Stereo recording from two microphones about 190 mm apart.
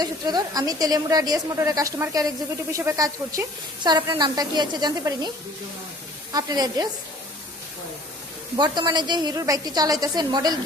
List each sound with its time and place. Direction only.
0.0 s a woman's voice: 20° right (ahead or behind)
6.3 s a woman's voice: 20° right (ahead or behind)
8.5 s a woman's voice: 25° right (ahead or behind)